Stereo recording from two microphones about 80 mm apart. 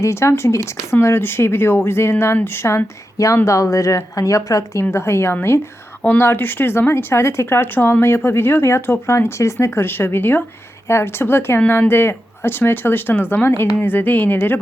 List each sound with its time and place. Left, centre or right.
0.0 s speech: left
4.8 s speech: left